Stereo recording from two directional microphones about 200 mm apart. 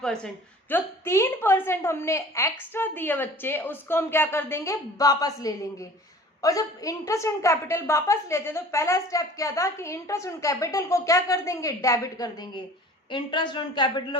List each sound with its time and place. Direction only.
0.0 s a woman's voice: 5° left (ahead or behind); by 14.2 s 20° left (ahead or behind)